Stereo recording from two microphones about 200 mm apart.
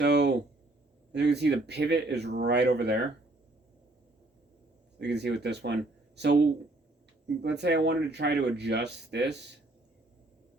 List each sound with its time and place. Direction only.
0.0 s a sound: 55° right (ahead or behind)
1.1 s speech: 55° right (ahead or behind)
4.9 s speech: 55° right (ahead or behind)